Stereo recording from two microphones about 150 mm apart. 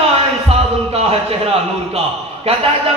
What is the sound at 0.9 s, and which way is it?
Speech, 40° right (ahead or behind).